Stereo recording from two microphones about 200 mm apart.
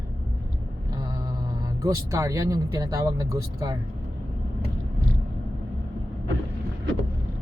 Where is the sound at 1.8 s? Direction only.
15° right (ahead or behind).